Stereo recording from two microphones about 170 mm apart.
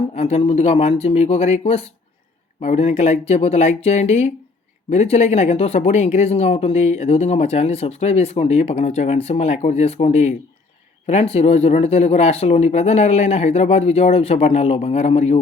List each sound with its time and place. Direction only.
0.1 s speech: 40° left (ahead or behind)